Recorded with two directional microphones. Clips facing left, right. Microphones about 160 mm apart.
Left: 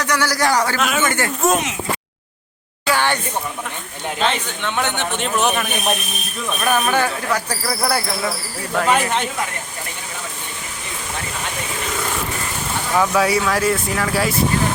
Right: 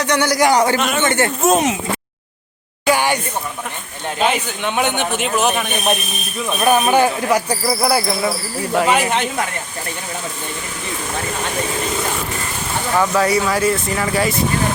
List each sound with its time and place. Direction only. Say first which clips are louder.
0.0 s speech: right 4 dB; 20° right (ahead or behind)
0.8 s a man's voice: right 1 dB; centre (ahead or behind)
1.0 s speech: right 4 dB; 25° right (ahead or behind)
2.8 s a sound: right 3 dB; 15° right (ahead or behind)
4.2 s a man's voice: right 3 dB; 10° right (ahead or behind)
6.6 s speech: right 5 dB; 20° right (ahead or behind)
13.0 s a man's voice: right 1 dB; 5° left (ahead or behind)